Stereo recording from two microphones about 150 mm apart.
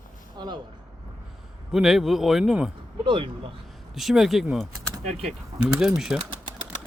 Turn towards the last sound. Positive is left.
turn(degrees=-5)  # may be behind; listen again after turning